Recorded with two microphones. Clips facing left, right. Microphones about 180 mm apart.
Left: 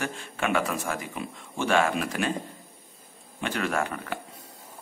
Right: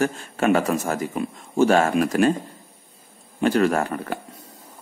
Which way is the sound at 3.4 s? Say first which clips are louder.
Right 9 dB; 40° right (ahead or behind).